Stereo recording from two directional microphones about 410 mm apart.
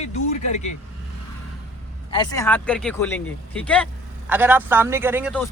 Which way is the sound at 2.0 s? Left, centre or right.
Centre.